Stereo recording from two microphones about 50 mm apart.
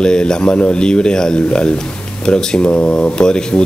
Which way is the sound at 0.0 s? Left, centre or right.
Centre.